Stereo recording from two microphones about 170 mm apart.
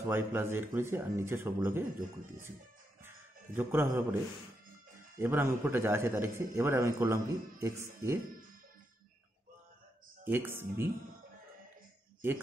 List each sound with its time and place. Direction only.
0.1 s a man's voice: 15° right (ahead or behind)
3.5 s a man's voice: 15° right (ahead or behind)
5.2 s a man's voice: 15° right (ahead or behind)
10.2 s a man's voice: 10° right (ahead or behind)